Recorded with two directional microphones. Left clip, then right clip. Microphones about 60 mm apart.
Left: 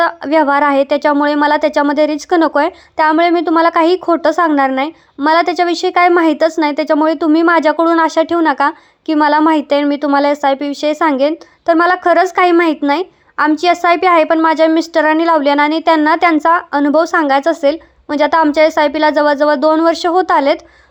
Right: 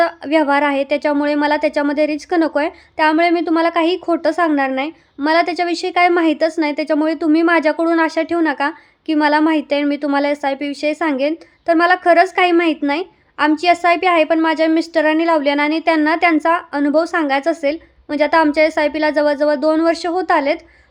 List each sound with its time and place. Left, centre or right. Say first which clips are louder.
0.0 s a woman's voice: left 3 dB; left
12.9 s a sound: left 5 dB; left
13.6 s a woman's voice: left 2 dB; left